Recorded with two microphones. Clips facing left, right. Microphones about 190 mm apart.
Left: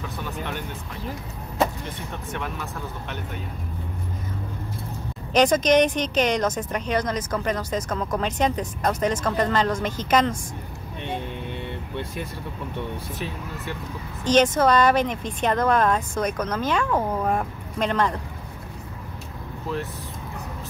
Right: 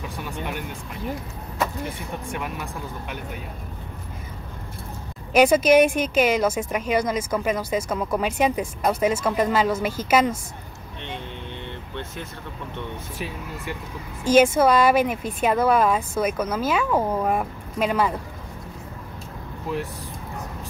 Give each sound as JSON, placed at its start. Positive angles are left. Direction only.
{"t": 1.9, "sound": "speech", "side_deg": -10}
{"t": 5.3, "sound": "speech", "side_deg": -10}
{"t": 11.6, "sound": "vehicle", "side_deg": 10}
{"t": 14.2, "sound": "speech", "side_deg": -10}